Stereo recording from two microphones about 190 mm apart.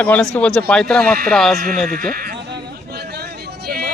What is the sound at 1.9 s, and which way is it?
Sheep, 50° right (ahead or behind).